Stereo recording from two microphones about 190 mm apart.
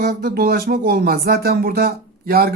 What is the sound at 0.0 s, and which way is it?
Speech, 50° right (ahead or behind).